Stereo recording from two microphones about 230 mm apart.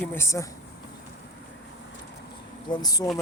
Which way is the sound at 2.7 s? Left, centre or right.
Centre.